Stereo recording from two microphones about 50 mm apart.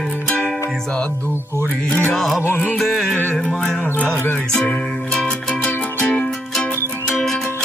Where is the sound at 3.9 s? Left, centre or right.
Left.